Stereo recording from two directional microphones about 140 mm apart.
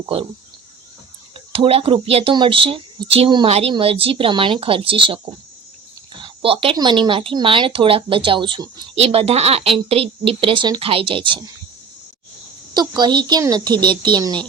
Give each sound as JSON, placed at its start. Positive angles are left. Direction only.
{"t": 1.5, "sound": "speech", "side_deg": -40}
{"t": 6.2, "sound": "a sound", "side_deg": -40}
{"t": 6.7, "sound": "speech", "side_deg": -35}
{"t": 13.0, "sound": "speech", "side_deg": -30}